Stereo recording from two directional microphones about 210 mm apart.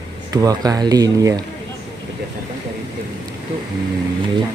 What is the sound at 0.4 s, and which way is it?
Speech, 15° right (ahead or behind).